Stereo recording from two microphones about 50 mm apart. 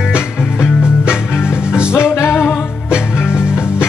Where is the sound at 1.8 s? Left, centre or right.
Centre.